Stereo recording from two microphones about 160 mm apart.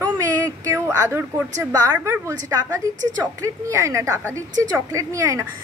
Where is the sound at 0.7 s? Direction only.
20° right (ahead or behind).